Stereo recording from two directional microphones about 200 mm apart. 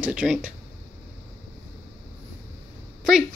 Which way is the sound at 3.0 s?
Centre (ahead or behind).